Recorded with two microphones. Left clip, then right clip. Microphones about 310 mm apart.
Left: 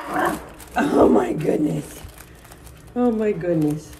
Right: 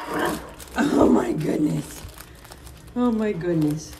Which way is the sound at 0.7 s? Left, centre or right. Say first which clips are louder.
Left 3 dB; centre.